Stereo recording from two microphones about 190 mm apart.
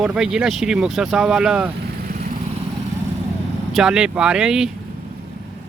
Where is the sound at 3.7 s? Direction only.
5° right (ahead or behind).